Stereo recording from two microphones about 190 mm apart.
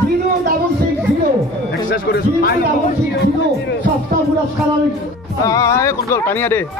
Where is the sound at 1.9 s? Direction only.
55° left (ahead or behind).